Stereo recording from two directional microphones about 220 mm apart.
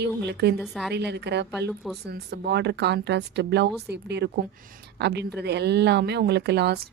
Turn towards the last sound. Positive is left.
turn(degrees=-50)  # may be behind; listen again after turning